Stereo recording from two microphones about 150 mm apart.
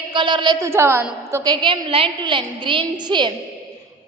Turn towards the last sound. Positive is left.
turn(degrees=-30)  # may be behind; listen again after turning